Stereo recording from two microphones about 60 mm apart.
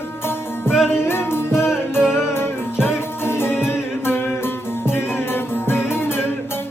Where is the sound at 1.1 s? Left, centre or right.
Left.